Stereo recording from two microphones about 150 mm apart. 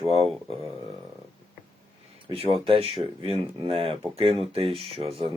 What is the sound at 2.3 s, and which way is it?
Speech, 35° right (ahead or behind).